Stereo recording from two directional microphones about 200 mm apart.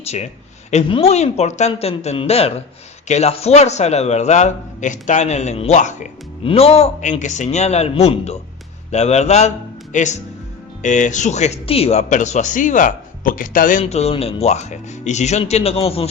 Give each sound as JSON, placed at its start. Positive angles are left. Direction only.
{"t": 0.0, "sound": "a man's voice", "side_deg": 35}